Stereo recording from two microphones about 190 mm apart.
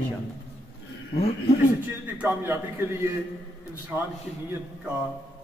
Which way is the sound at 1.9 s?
10° right (ahead or behind).